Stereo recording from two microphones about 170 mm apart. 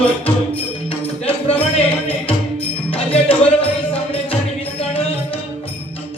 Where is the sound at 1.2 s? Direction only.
35° left (ahead or behind).